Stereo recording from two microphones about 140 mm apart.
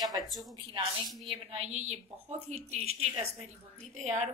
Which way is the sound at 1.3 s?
45° right (ahead or behind).